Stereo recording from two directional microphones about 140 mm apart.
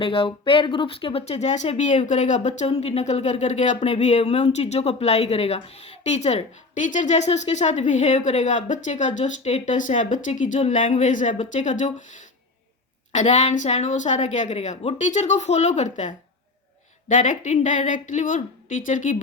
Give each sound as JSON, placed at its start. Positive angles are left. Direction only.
{"t": 0.0, "sound": "speech", "side_deg": 40}